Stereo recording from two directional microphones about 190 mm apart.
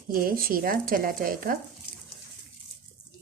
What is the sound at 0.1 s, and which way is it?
Speech, 50° right (ahead or behind).